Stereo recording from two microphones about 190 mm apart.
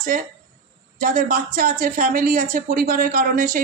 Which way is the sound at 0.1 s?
45° right (ahead or behind).